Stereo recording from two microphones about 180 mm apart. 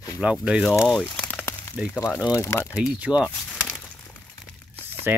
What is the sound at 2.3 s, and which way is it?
Speech, 15° left (ahead or behind).